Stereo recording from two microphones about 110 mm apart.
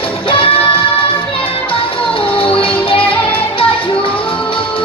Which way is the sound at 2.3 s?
55° left (ahead or behind).